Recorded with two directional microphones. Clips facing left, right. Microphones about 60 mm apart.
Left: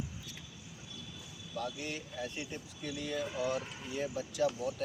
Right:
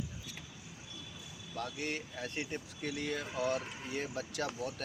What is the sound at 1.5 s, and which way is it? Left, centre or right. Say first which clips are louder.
Speech: even; right.